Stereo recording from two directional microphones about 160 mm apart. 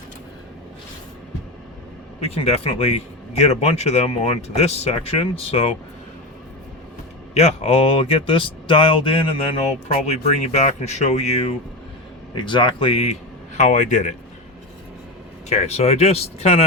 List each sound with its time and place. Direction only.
2.2 s speech: 40° left (ahead or behind)
7.3 s speech: 40° left (ahead or behind)
12.3 s speech: 30° left (ahead or behind)
13.6 s speech: 50° left (ahead or behind)
15.4 s speech: 40° left (ahead or behind)